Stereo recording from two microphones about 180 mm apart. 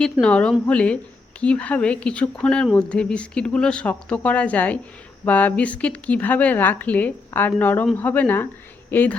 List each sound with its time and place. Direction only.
0.0 s speech: 5° left (ahead or behind)